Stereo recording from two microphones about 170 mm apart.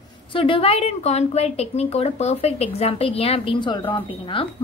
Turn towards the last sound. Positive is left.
turn(degrees=30)  # may be behind; listen again after turning